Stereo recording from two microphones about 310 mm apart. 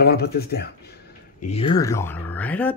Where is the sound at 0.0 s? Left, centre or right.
Left.